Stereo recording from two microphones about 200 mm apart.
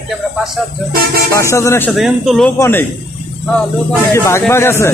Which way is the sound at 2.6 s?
10° left (ahead or behind).